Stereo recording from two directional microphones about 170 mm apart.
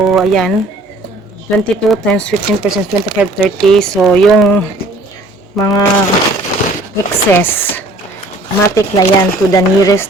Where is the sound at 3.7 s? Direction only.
5° left (ahead or behind).